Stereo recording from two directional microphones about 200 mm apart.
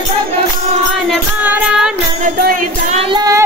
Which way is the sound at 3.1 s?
15° right (ahead or behind).